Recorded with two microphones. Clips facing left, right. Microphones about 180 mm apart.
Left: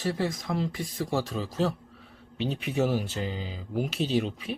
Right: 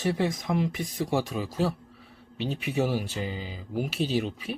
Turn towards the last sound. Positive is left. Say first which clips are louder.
# even
turn(degrees=-5)  # may be behind; listen again after turning